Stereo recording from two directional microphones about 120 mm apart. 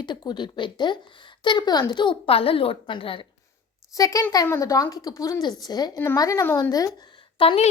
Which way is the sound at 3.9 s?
30° left (ahead or behind).